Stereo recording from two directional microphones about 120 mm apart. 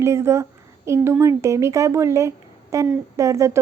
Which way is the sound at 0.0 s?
25° right (ahead or behind).